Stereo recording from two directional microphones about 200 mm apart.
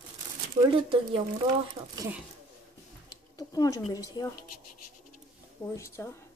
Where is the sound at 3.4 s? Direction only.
15° left (ahead or behind).